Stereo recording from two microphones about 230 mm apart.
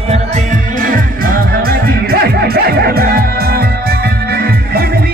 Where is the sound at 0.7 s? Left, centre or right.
Right.